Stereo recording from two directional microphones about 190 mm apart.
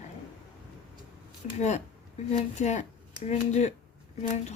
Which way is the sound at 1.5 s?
35° left (ahead or behind).